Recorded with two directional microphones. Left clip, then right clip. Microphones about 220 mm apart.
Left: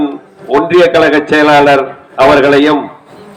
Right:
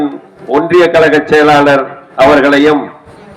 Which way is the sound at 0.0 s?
50° right (ahead or behind).